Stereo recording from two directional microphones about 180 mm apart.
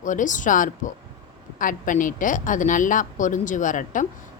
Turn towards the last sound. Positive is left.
turn(degrees=45)  # may be behind; listen again after turning